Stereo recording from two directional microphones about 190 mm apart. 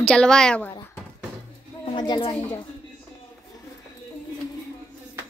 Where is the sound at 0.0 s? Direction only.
5° left (ahead or behind).